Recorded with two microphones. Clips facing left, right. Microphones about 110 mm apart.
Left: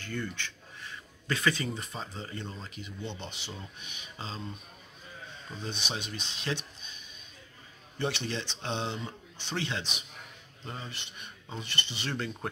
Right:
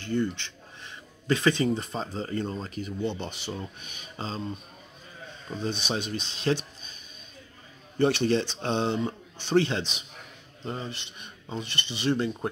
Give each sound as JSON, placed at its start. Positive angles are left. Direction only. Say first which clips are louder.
{"t": 0.0, "sound": "speech", "louder": "right 8 dB", "side_deg": -25}
{"t": 5.5, "sound": "speech", "louder": "right 7 dB", "side_deg": -35}
{"t": 8.0, "sound": "speech", "louder": "right 10 dB", "side_deg": -45}
{"t": 10.6, "sound": "cutlery", "louder": "right 7 dB", "side_deg": -30}